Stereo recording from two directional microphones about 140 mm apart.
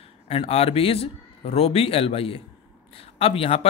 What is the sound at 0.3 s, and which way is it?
Speech, 45° left (ahead or behind).